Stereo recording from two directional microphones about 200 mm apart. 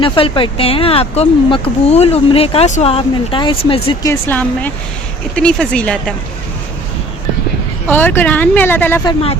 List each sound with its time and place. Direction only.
0.0 s speech: 25° left (ahead or behind)
4.0 s speech: 10° left (ahead or behind)
7.9 s speech: 10° left (ahead or behind)
9.0 s speech: 30° left (ahead or behind)